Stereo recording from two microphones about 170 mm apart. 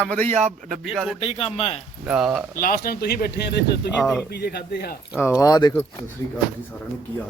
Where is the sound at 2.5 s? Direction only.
60° left (ahead or behind).